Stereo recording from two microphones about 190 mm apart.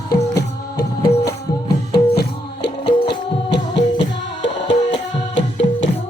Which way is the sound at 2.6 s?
65° left (ahead or behind).